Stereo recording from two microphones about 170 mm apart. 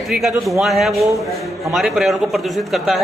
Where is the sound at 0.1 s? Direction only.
Centre (ahead or behind).